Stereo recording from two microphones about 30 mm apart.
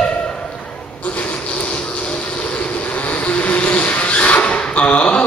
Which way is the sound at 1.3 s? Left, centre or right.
Left.